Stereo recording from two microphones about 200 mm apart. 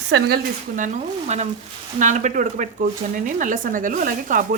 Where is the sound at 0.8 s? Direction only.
35° right (ahead or behind).